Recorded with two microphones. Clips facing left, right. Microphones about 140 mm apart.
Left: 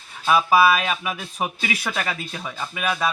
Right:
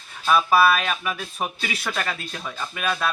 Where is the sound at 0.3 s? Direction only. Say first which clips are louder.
Left 1 dB; 10° left (ahead or behind).